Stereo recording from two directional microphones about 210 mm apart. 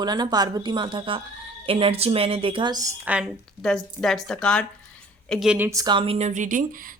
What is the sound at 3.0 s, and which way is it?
A woman's voice, 5° right (ahead or behind).